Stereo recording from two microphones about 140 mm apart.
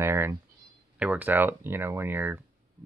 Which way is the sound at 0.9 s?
10° right (ahead or behind).